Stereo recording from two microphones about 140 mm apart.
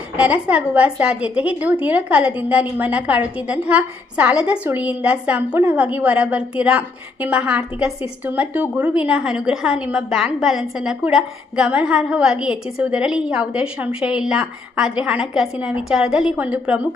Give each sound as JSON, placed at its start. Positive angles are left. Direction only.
{"t": 0.2, "sound": "a woman's voice", "side_deg": -10}